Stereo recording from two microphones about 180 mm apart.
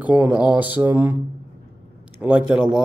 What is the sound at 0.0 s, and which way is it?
Speech, 10° right (ahead or behind).